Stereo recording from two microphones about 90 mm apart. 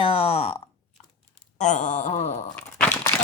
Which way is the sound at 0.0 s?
90° left.